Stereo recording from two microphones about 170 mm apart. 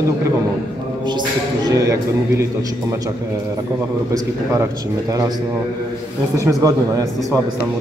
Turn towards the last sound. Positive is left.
turn(degrees=-20)  # may be behind; listen again after turning